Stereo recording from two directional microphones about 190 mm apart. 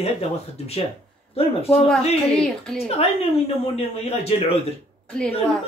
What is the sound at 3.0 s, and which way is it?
A man's voice, 30° left (ahead or behind).